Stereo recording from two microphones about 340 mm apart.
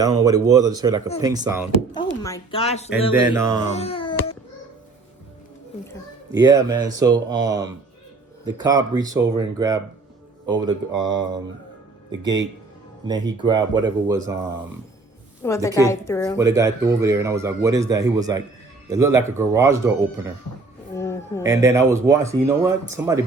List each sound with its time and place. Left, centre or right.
0.0 s speech: centre
1.9 s speech: centre
3.1 s speech: centre
3.7 s baby cry: centre
6.3 s speech: centre
13.1 s speech: centre
15.4 s a woman's voice: centre
16.4 s speech: centre
20.9 s music: centre
21.4 s speech: centre